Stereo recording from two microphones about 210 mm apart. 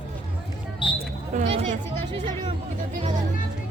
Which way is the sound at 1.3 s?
35° right (ahead or behind).